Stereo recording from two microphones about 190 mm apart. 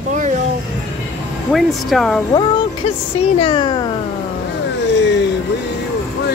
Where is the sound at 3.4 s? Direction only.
25° left (ahead or behind).